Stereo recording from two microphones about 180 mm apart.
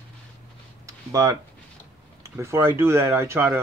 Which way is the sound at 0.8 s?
20° right (ahead or behind).